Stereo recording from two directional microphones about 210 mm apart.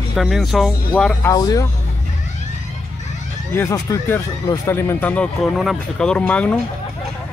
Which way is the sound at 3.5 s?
15° left (ahead or behind).